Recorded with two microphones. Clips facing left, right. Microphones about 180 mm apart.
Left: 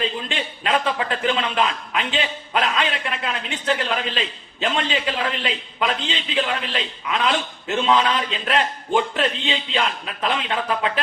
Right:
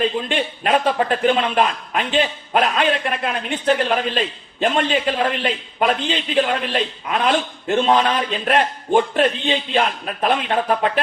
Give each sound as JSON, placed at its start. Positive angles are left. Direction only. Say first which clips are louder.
{"t": 0.0, "sound": "a man's voice", "louder": "right 6 dB", "side_deg": -50}